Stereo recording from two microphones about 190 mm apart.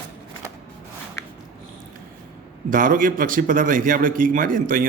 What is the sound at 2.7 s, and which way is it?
A man's voice, 45° right (ahead or behind).